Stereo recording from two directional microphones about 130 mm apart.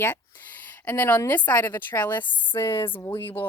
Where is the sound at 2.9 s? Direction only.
15° left (ahead or behind).